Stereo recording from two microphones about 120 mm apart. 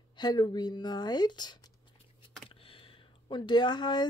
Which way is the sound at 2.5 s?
50° left (ahead or behind).